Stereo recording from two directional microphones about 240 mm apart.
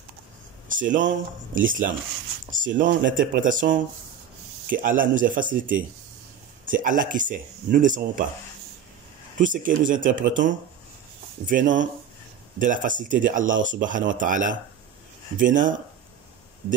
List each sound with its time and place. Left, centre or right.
0.7 s speech: right
9.4 s speech: right